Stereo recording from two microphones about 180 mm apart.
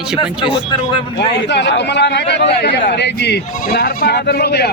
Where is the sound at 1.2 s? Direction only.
75° left (ahead or behind).